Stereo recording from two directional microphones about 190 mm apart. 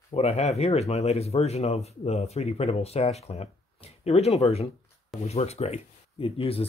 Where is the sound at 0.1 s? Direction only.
35° left (ahead or behind).